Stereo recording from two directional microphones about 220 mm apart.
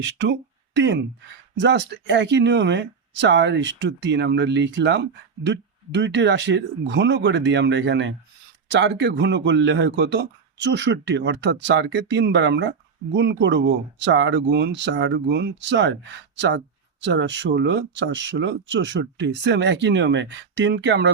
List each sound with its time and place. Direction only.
0.0 s speech: 50° right (ahead or behind)